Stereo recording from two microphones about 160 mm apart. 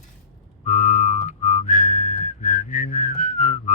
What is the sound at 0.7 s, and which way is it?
Whistling, 55° left (ahead or behind).